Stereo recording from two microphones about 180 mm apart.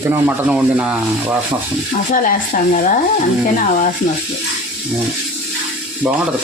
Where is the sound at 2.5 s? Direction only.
45° left (ahead or behind).